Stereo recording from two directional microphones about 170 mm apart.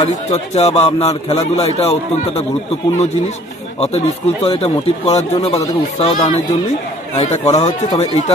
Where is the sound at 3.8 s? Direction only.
35° left (ahead or behind).